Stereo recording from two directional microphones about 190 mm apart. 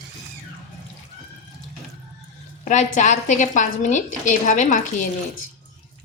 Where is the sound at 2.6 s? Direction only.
40° left (ahead or behind).